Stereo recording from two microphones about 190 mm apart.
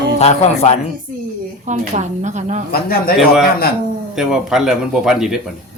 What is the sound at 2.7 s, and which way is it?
Speech, 55° left (ahead or behind).